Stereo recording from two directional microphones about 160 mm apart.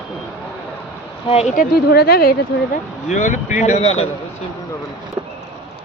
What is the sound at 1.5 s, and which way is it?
Speech, 80° left.